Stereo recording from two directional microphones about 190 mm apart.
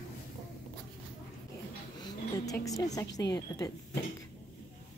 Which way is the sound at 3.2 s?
20° left (ahead or behind).